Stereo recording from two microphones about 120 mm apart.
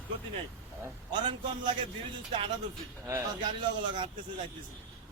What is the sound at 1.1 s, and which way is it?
Speech, 40° right (ahead or behind).